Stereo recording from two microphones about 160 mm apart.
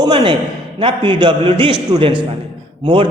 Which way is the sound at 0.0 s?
30° right (ahead or behind).